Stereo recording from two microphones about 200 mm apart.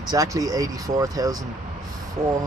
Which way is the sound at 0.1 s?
15° right (ahead or behind).